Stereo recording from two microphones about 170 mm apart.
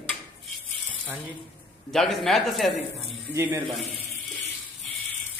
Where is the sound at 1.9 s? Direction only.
Centre (ahead or behind).